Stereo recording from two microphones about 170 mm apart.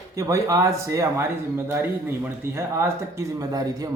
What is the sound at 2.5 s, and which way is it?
A man's voice, 15° right (ahead or behind).